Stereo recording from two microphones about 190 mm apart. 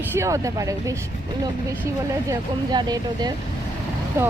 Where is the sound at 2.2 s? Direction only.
20° right (ahead or behind).